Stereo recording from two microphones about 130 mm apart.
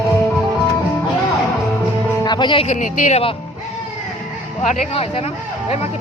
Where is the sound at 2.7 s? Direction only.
70° left (ahead or behind).